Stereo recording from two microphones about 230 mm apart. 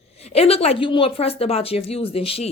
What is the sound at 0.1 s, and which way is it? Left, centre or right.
Speech, left.